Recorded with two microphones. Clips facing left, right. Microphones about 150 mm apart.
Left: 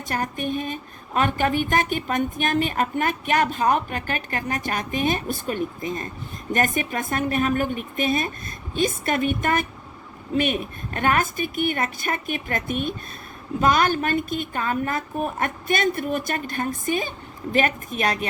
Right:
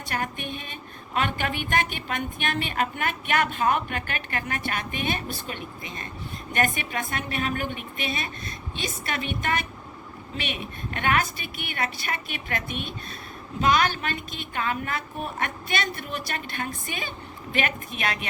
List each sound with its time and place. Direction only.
0.1 s a woman's voice: 40° left (ahead or behind)